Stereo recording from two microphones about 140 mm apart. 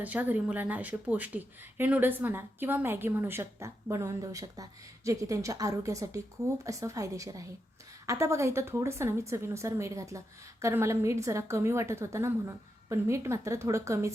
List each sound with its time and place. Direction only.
0.0 s speech: 10° right (ahead or behind)